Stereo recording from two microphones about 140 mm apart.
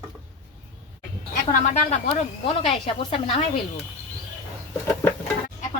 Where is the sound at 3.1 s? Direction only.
40° left (ahead or behind).